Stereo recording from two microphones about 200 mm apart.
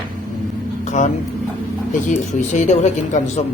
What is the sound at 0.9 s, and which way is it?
A man's voice, 40° left (ahead or behind).